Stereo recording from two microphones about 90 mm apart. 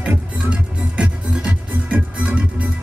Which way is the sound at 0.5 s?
10° right (ahead or behind).